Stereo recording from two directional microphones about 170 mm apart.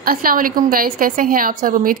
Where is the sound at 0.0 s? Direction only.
60° right (ahead or behind).